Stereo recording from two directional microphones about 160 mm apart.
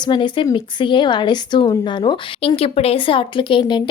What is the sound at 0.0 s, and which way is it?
A woman's voice, 30° left (ahead or behind).